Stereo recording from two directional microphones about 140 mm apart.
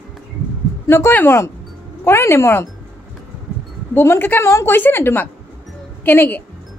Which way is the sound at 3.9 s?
15° left (ahead or behind).